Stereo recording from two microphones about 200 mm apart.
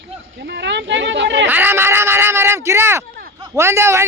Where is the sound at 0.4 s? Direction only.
55° right (ahead or behind).